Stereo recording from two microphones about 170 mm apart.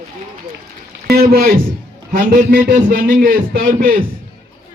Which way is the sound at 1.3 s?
60° right (ahead or behind).